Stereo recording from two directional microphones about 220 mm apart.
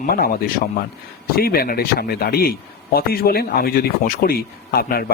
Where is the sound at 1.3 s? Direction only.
45° left (ahead or behind).